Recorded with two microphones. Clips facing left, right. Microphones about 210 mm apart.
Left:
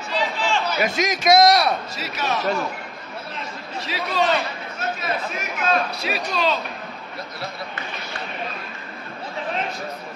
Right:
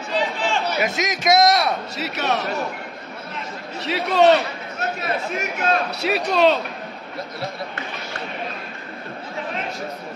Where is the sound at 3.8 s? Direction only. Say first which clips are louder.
Right 7 dB; 70° right (ahead or behind).